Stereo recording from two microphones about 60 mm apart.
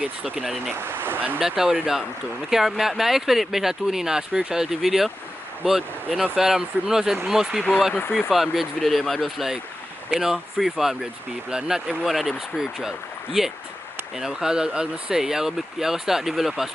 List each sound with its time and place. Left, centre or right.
0.0 s speech: right
0.4 s speech: centre
0.7 s speech: right
1.6 s speech: centre
6.3 s speech: centre